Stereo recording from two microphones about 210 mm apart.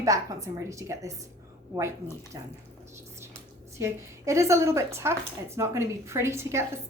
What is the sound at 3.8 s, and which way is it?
A woman's voice, 15° right (ahead or behind).